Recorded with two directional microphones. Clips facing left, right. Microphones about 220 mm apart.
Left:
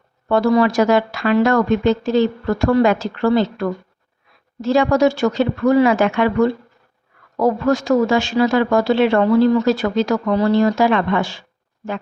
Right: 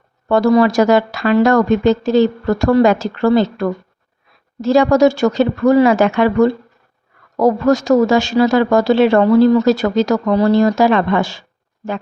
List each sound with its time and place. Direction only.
0.3 s speech: 40° right (ahead or behind)